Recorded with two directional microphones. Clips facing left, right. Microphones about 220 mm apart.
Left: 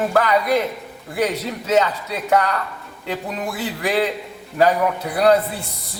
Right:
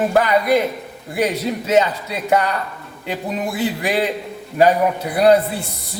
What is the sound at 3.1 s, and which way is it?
Speech, 15° right (ahead or behind).